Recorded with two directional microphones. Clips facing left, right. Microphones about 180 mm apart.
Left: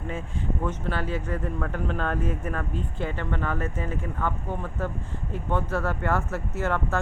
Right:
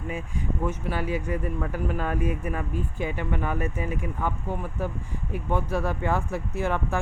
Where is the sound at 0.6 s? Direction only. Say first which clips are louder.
Right 1 dB; 10° right (ahead or behind).